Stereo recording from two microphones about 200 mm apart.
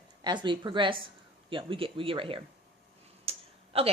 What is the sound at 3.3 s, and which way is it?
Tick-tock, 30° right (ahead or behind).